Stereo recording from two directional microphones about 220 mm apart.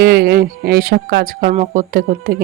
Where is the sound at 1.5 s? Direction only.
30° right (ahead or behind).